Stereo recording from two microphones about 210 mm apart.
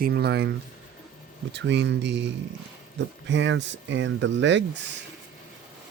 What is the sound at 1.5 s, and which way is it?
Speech, 55° right (ahead or behind).